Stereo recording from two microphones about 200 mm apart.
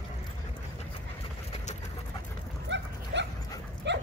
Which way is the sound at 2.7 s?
60° right (ahead or behind).